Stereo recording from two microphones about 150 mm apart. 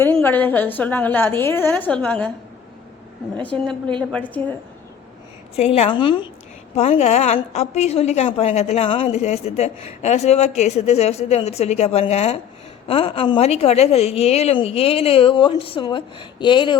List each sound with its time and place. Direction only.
0.0 s a woman's voice: 15° left (ahead or behind)
3.3 s a woman's voice: 10° left (ahead or behind)
5.5 s a woman's voice: 45° left (ahead or behind)
6.7 s a woman's voice: 45° left (ahead or behind)